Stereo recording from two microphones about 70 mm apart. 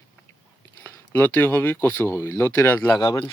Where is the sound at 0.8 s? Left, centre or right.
Left.